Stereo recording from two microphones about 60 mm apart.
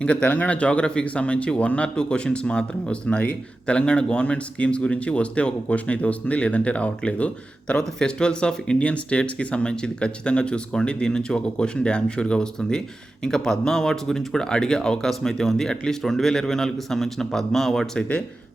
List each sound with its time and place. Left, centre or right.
0.0 s speech: centre